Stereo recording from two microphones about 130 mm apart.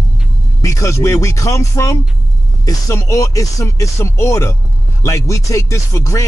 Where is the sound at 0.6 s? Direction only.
25° left (ahead or behind).